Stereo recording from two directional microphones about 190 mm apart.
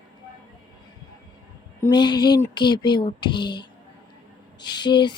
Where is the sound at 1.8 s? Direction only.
20° left (ahead or behind).